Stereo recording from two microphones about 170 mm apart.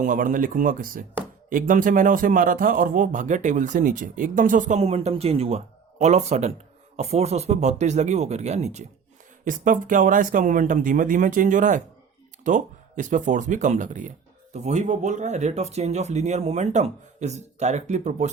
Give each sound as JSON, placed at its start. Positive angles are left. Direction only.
{"t": 0.0, "sound": "speech", "side_deg": -50}
{"t": 9.4, "sound": "speech", "side_deg": -50}